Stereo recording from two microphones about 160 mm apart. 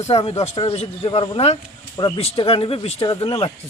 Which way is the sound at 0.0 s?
40° left (ahead or behind).